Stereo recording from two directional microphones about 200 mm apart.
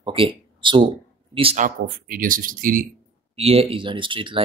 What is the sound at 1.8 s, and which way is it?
Speech, 45° right (ahead or behind).